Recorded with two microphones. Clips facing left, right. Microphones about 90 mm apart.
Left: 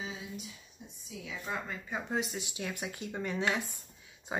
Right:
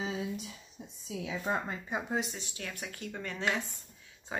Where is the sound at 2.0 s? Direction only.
Centre (ahead or behind).